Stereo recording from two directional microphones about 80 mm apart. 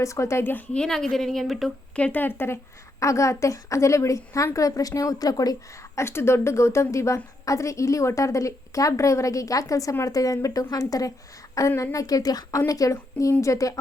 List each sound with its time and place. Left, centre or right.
0.0 s a woman's voice: left
0.5 s a woman's voice: centre
2.0 s speech: centre
3.0 s a woman's voice: left
6.0 s a woman's voice: left